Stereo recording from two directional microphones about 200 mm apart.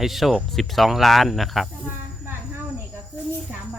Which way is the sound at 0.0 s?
Centre (ahead or behind).